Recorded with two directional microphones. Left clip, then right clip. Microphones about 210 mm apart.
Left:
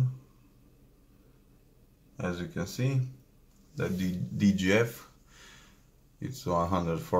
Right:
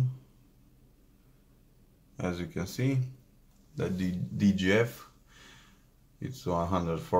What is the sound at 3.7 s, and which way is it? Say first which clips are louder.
Speech: even; 25° right (ahead or behind).